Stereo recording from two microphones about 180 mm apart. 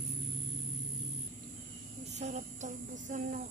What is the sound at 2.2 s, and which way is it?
Speech, 40° right (ahead or behind).